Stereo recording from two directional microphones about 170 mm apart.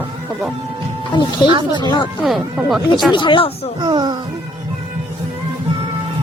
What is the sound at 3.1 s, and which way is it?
Speech, 30° left (ahead or behind).